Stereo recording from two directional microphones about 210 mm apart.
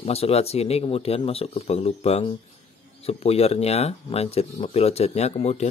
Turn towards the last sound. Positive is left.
turn(degrees=30)  # may be behind; listen again after turning